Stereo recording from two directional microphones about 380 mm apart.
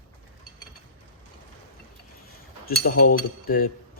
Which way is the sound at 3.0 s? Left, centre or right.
Left.